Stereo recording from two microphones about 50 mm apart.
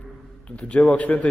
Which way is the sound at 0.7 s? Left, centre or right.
Left.